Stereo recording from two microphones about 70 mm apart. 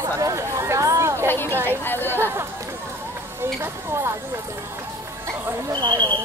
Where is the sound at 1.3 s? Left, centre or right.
Left.